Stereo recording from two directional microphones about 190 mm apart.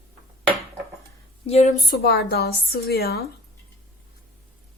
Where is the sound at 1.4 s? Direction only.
35° left (ahead or behind).